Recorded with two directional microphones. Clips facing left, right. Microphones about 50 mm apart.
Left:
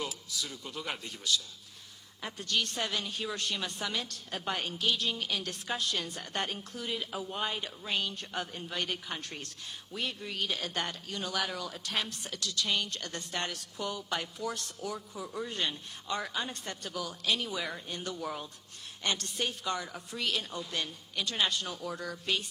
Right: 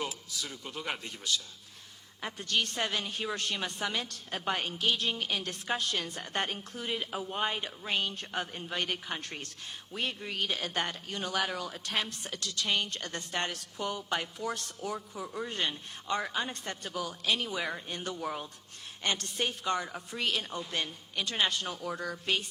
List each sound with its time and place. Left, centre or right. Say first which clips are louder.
0.0 s a man's voice: right 1 dB; right